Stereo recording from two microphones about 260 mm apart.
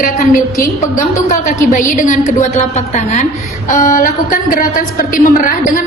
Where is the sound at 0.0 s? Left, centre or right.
Left.